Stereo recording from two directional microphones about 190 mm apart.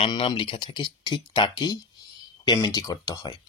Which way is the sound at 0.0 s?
25° left (ahead or behind).